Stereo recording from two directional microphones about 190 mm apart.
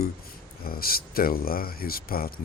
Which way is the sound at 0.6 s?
50° left (ahead or behind).